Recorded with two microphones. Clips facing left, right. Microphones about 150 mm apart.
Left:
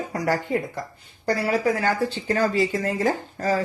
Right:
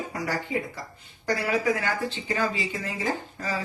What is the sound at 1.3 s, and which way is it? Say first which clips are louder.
Speech: left 3 dB; 35° left (ahead or behind).